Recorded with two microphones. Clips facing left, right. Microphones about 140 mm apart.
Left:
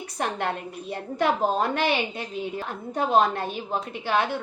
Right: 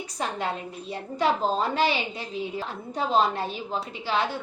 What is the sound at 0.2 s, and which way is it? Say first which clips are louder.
A woman's voice: left 2 dB; 60° left (ahead or behind).